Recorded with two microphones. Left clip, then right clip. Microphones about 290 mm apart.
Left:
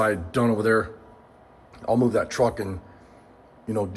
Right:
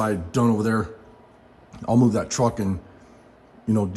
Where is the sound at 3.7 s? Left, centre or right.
Right.